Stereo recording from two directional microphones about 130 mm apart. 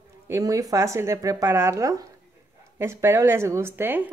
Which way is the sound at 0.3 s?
25° right (ahead or behind).